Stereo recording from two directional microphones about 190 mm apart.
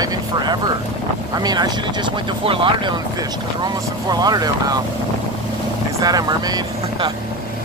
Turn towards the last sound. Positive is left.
turn(degrees=-20)  # may be behind; listen again after turning